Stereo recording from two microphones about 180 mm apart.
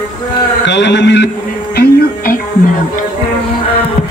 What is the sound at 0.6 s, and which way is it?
Speech, 80° left.